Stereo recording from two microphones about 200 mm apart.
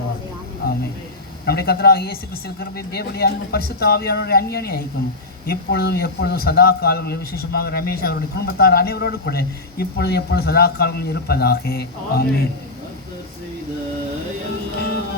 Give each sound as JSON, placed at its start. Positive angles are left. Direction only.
{"t": 1.5, "sound": "a man's voice", "side_deg": 50}